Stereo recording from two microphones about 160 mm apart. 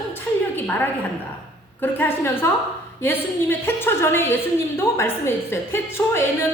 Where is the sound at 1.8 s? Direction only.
15° left (ahead or behind).